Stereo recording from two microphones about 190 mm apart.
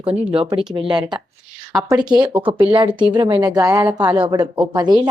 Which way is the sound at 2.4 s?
25° right (ahead or behind).